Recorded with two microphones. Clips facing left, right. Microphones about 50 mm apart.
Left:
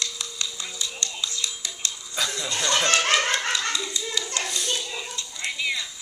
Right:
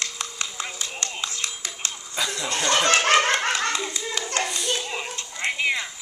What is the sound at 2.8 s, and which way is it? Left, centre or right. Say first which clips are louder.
Clapping: right 3 dB; right.